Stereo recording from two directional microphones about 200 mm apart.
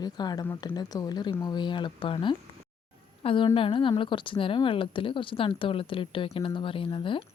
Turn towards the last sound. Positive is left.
turn(degrees=25)  # may be behind; listen again after turning